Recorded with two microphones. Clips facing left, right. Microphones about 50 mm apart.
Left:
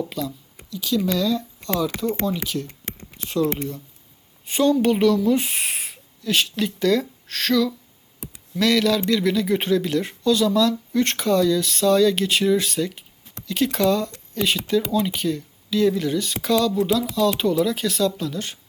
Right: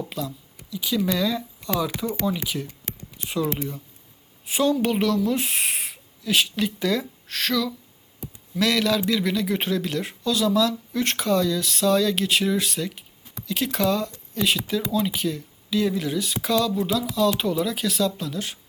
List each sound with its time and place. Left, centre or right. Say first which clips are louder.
0.0 s a sound: left 3 dB; centre
0.7 s speech: left 2 dB; centre
2.6 s a sound: left 1 dB; left
3.2 s speech: left 3 dB; centre
8.2 s computer keyboard: even; left
8.5 s speech: left 3 dB; centre